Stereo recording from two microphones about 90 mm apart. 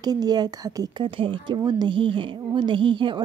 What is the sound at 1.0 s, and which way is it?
Speech, 70° right (ahead or behind).